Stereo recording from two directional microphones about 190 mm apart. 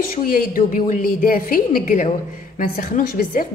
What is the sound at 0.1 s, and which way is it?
A woman's voice, 50° left (ahead or behind).